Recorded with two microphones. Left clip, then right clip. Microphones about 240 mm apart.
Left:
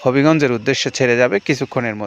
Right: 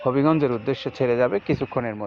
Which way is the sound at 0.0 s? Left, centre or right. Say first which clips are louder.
Left 6 dB; left.